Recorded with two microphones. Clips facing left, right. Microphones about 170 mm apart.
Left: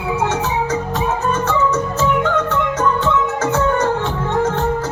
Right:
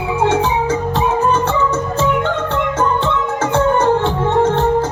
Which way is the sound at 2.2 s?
30° right (ahead or behind).